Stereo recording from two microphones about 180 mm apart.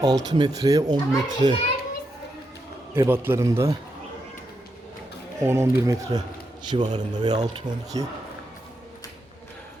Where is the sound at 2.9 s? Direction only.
15° right (ahead or behind).